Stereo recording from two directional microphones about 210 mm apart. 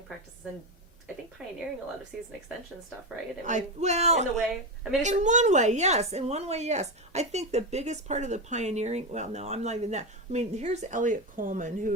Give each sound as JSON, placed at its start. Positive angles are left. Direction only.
{"t": 1.4, "sound": "speech", "side_deg": -5}
{"t": 3.4, "sound": "a woman's voice", "side_deg": -35}
{"t": 4.4, "sound": "speech", "side_deg": 0}
{"t": 5.0, "sound": "a woman's voice", "side_deg": -35}